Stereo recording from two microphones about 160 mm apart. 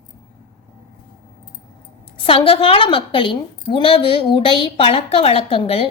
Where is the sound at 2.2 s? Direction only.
35° left (ahead or behind).